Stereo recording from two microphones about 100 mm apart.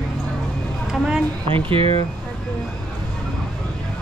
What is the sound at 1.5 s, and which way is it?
Speech, 60° right (ahead or behind).